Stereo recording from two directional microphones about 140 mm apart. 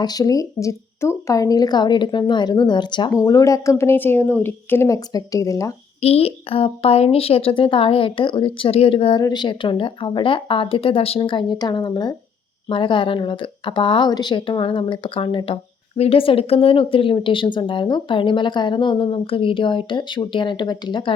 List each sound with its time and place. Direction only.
0.0 s speech: 25° left (ahead or behind)
6.0 s speech: 45° left (ahead or behind)